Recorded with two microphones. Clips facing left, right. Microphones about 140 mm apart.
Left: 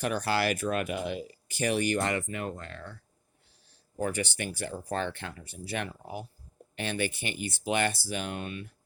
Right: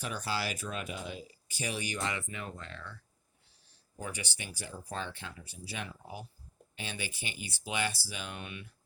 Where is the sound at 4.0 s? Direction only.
55° left (ahead or behind).